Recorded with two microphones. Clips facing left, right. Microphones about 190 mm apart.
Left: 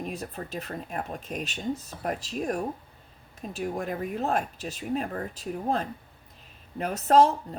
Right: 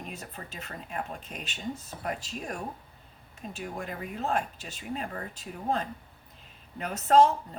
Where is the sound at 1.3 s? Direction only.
40° left (ahead or behind).